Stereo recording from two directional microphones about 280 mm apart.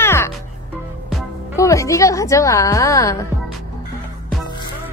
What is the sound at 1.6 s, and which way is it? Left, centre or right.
A woman's voice, centre.